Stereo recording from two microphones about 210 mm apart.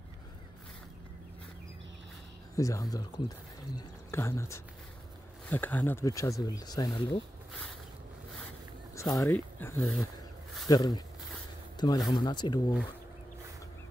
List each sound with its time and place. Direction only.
2.5 s speech: 15° left (ahead or behind)
8.9 s speech: 15° left (ahead or behind)
10.7 s speech: 20° left (ahead or behind)
11.7 s a sound: 20° left (ahead or behind)
12.1 s speech: 20° left (ahead or behind)